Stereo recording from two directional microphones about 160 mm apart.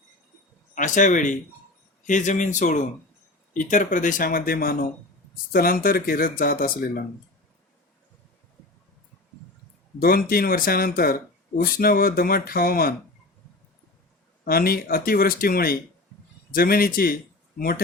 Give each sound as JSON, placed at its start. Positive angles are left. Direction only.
{"t": 0.8, "sound": "speech", "side_deg": 50}
{"t": 10.0, "sound": "speech", "side_deg": 65}
{"t": 14.4, "sound": "speech", "side_deg": 70}